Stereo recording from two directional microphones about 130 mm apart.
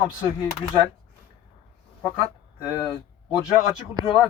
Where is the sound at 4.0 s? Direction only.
35° right (ahead or behind).